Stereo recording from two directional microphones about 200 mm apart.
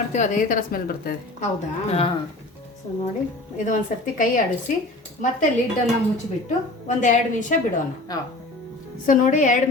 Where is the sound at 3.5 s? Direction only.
40° left (ahead or behind).